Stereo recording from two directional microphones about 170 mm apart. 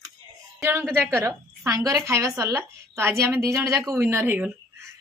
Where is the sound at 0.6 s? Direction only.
15° right (ahead or behind).